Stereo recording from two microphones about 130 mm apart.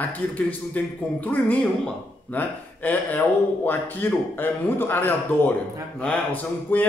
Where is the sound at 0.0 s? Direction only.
10° left (ahead or behind).